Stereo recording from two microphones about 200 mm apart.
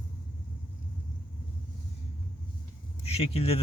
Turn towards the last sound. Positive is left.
turn(degrees=30)  # may be behind; listen again after turning